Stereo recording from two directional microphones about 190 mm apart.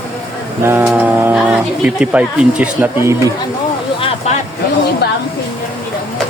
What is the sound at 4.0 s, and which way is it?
Vehicle, 30° left (ahead or behind).